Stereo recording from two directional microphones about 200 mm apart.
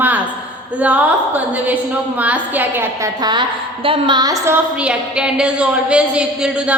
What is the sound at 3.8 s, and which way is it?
A woman's voice, 25° right (ahead or behind).